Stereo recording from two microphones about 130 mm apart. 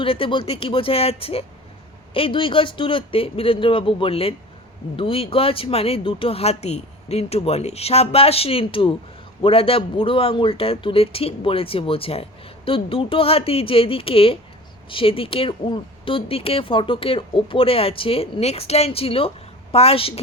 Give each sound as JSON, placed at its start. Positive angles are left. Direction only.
{"t": 0.0, "sound": "speech", "side_deg": 45}